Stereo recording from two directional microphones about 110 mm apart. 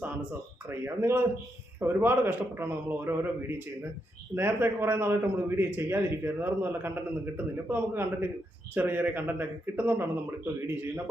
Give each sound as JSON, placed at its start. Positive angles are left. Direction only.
{"t": 0.7, "sound": "a man's voice", "side_deg": -20}